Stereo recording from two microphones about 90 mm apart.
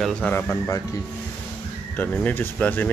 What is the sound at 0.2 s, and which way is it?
Speech, 20° left (ahead or behind).